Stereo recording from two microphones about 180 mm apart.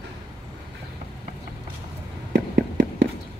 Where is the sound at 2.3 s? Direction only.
85° right.